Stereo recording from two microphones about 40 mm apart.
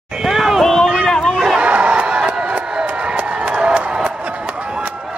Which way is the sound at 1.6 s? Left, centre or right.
Right.